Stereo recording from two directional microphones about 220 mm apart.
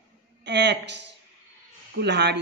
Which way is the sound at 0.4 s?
50° right (ahead or behind).